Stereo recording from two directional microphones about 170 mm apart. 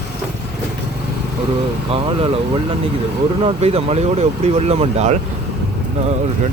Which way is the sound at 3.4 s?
35° right (ahead or behind).